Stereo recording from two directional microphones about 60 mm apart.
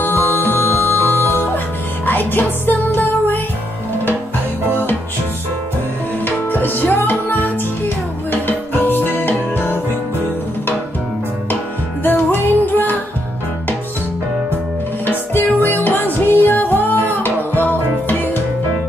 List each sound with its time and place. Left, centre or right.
0.0 s music: left
6.2 s music: left
12.0 s music: left
15.0 s music: left